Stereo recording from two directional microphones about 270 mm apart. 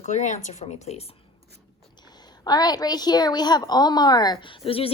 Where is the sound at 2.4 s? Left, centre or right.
Centre.